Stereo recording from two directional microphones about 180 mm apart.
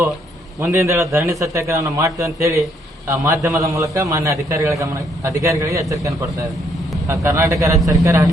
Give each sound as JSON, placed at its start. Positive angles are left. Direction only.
{"t": 0.6, "sound": "a man's voice", "side_deg": -15}